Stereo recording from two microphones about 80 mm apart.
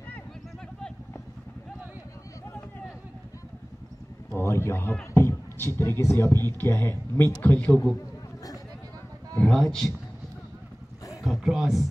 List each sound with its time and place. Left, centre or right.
4.4 s a man's voice: left
5.1 s a sound: left
5.8 s a man's voice: left
9.5 s a man's voice: centre
11.2 s speech: centre